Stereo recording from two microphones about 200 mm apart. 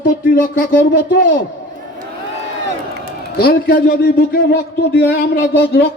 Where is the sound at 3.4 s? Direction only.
50° left (ahead or behind).